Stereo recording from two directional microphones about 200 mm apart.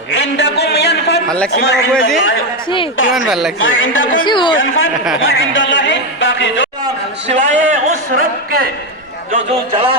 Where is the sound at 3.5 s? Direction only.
75° left (ahead or behind).